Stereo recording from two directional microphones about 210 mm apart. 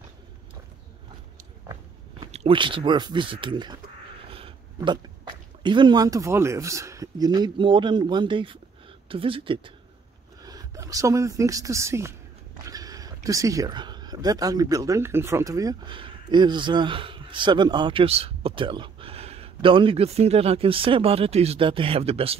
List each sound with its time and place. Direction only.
2.3 s speech: 25° right (ahead or behind)